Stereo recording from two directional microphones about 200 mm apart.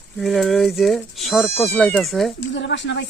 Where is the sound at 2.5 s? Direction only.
65° left (ahead or behind).